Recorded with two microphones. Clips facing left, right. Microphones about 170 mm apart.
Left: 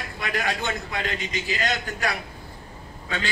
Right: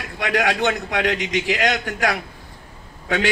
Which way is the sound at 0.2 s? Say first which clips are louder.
Right 8 dB; 85° right.